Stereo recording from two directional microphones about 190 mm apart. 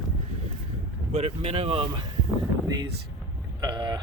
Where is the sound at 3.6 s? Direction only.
20° right (ahead or behind).